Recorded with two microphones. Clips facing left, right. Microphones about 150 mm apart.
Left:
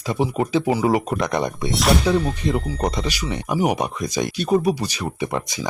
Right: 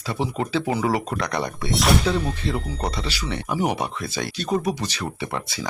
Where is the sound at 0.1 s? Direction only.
15° left (ahead or behind).